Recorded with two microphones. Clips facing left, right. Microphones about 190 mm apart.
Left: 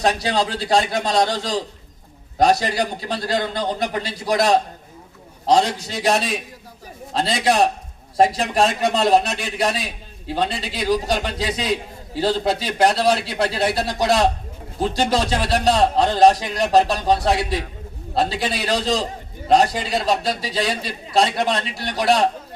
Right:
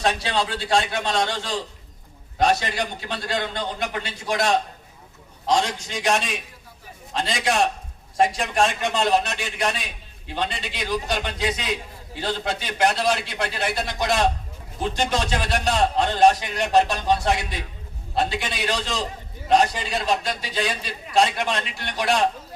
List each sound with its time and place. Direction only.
0.0 s a man's voice: 40° left (ahead or behind)